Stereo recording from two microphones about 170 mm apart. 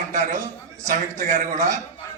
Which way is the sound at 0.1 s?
50° right (ahead or behind).